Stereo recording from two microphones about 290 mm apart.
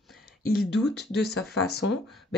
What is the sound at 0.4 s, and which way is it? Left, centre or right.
Speech, left.